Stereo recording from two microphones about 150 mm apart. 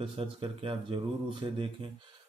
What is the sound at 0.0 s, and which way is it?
Speech, 35° right (ahead or behind).